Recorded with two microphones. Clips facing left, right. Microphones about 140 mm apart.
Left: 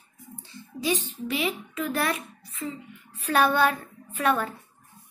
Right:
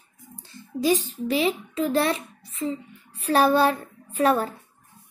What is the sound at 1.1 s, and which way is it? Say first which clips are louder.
A child's voice: right 5 dB; 35° right (ahead or behind).